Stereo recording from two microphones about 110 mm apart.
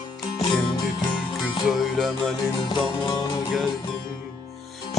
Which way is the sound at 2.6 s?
45° left (ahead or behind).